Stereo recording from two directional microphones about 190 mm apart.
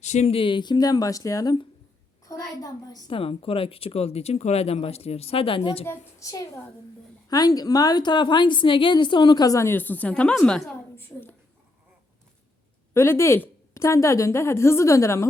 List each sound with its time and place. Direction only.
0.0 s a woman's voice: 35° left (ahead or behind)
5.8 s a woman's voice: 15° left (ahead or behind)
12.9 s a woman's voice: 15° left (ahead or behind)